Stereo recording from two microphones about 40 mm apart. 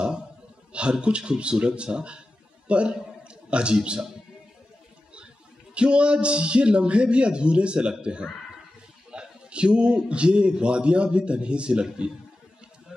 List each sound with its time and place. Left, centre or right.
0.7 s a man's voice: right
5.8 s a man's voice: right